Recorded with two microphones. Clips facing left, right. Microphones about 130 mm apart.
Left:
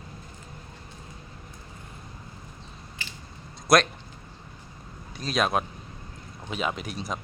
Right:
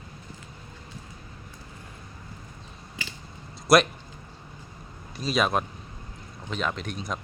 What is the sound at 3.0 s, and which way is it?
Biting, 90° right.